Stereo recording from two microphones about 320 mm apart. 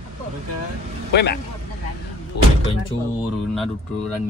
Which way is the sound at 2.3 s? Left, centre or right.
Left.